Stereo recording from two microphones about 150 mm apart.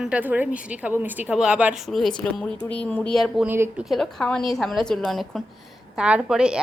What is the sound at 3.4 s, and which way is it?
Speech, 10° right (ahead or behind).